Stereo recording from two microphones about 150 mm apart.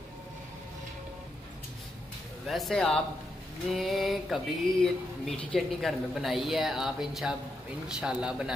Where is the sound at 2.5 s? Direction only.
Centre (ahead or behind).